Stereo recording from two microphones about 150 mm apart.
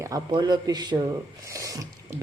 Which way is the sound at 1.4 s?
20° right (ahead or behind).